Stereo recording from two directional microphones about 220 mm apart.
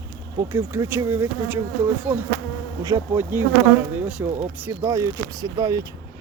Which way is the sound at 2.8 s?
10° right (ahead or behind).